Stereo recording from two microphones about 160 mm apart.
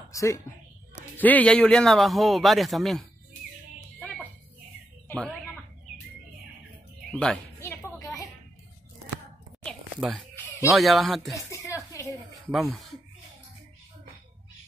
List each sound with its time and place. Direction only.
0.1 s a woman's voice: 20° left (ahead or behind); by 3.1 s centre (ahead or behind)
5.0 s a sound: 5° left (ahead or behind)
7.1 s a woman's voice: 5° left (ahead or behind)
7.6 s a sound: 20° left (ahead or behind)
9.9 s speech: 5° right (ahead or behind)
11.5 s music: 20° left (ahead or behind)
12.4 s speech: centre (ahead or behind)